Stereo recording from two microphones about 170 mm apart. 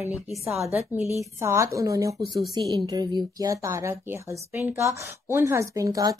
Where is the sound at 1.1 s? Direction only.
15° right (ahead or behind).